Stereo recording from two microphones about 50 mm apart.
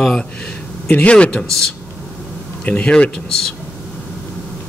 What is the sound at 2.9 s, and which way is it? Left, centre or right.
Speech, centre.